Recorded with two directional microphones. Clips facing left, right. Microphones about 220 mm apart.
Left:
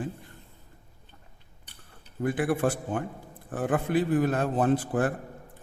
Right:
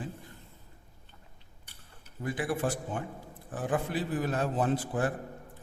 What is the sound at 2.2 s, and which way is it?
A man's voice, 55° left (ahead or behind).